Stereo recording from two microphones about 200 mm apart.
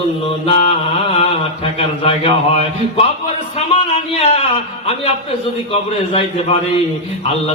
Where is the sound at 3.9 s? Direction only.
30° left (ahead or behind).